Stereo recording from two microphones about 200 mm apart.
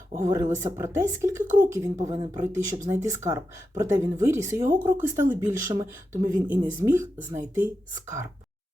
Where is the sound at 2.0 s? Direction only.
20° right (ahead or behind).